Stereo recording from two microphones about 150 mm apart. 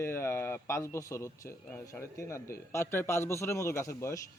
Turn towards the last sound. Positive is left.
turn(degrees=20)  # may be behind; listen again after turning